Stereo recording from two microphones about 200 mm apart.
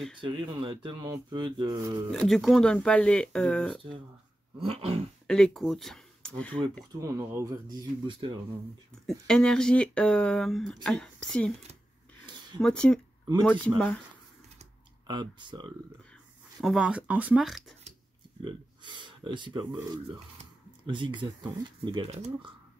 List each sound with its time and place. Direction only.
0.2 s speech: 25° right (ahead or behind)
2.0 s speech: centre (ahead or behind)
4.6 s speech: 30° right (ahead or behind)
5.2 s speech: centre (ahead or behind)
7.0 s speech: 15° right (ahead or behind)
9.0 s speech: 5° left (ahead or behind)
12.5 s speech: 5° left (ahead or behind)
15.0 s speech: 20° right (ahead or behind)
16.6 s speech: 5° right (ahead or behind)
18.4 s speech: 25° right (ahead or behind)